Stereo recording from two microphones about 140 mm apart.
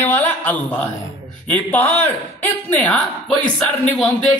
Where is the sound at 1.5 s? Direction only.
10° left (ahead or behind).